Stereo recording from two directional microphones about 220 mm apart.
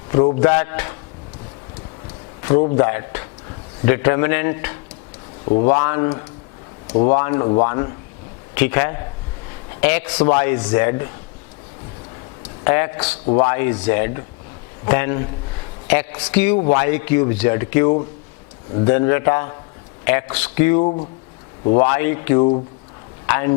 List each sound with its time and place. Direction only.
0.3 s a man's voice: 15° left (ahead or behind)
2.7 s a man's voice: 15° left (ahead or behind)
12.6 s a man's voice: 15° left (ahead or behind)
13.2 s a man's voice: 25° left (ahead or behind)
20.8 s speech: 35° left (ahead or behind)
21.8 s a man's voice: 15° left (ahead or behind)
22.4 s speech: 30° left (ahead or behind)
23.2 s speech: 15° left (ahead or behind)